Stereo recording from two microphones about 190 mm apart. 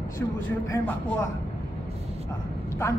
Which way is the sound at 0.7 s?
15° left (ahead or behind).